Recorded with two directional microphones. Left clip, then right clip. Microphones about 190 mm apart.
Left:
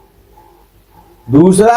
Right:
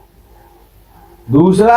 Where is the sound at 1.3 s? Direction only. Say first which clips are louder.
Left 2 dB; 35° left (ahead or behind).